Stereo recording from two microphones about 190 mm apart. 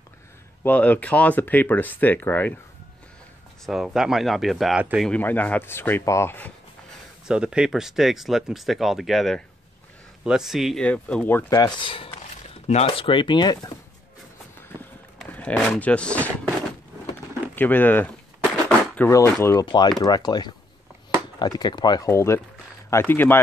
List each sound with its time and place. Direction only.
0.7 s speech: 10° left (ahead or behind)
3.6 s speech: centre (ahead or behind)
7.2 s speech: 5° right (ahead or behind); by 13.6 s 25° left (ahead or behind)
14.8 s a sound: 10° left (ahead or behind)
17.6 s speech: 10° left (ahead or behind)
18.7 s a sound: 10° left (ahead or behind)
19.4 s speech: 20° left (ahead or behind)